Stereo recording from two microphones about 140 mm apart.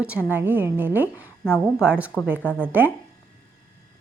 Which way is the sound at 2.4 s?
10° left (ahead or behind).